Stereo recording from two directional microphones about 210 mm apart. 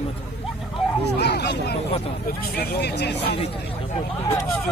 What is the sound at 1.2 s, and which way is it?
Speech, 50° left (ahead or behind).